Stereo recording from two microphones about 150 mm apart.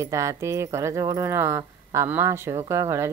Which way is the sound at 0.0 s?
20° right (ahead or behind).